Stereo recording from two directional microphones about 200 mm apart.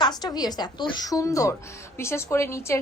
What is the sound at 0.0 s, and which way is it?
A woman's voice, 20° left (ahead or behind).